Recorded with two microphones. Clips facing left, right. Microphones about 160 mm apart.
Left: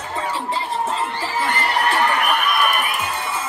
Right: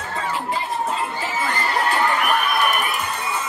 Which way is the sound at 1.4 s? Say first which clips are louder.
Left 3 dB; 70° left (ahead or behind).